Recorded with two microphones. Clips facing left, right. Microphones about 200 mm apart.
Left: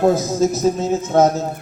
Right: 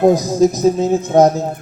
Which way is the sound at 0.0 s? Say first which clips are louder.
Right 4 dB; 15° right (ahead or behind).